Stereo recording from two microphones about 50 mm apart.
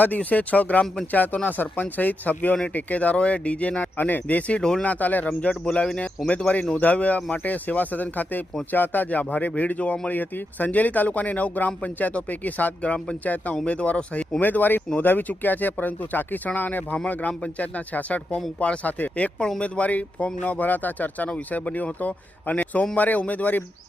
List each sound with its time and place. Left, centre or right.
0.0 s speech: left
3.9 s speech: left
6.2 s speech: centre
6.7 s speech: left
10.1 s speech: left